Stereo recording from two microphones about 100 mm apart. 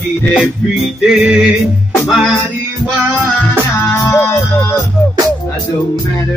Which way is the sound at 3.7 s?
25° left (ahead or behind).